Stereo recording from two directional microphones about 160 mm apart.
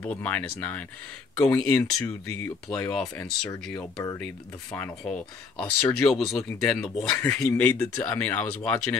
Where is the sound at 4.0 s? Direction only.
20° left (ahead or behind).